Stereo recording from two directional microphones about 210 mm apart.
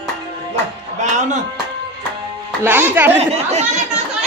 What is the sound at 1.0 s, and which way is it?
Music, 35° right (ahead or behind).